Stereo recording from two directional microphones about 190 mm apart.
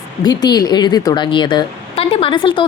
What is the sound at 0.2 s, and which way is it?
Speech, 20° left (ahead or behind).